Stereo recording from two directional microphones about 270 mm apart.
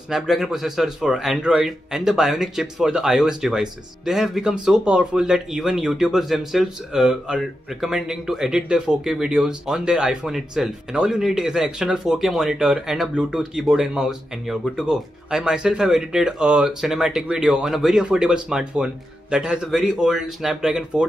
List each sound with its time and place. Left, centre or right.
0.1 s speech: centre